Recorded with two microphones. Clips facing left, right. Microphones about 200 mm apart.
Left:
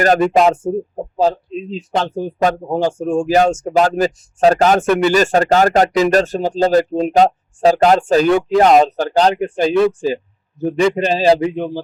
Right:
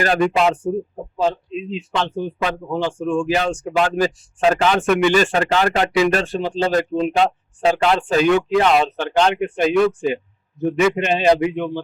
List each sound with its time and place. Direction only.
0.3 s speech: 45° left (ahead or behind)